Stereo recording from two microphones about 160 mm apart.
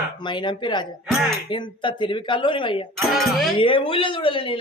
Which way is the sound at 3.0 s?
Centre (ahead or behind).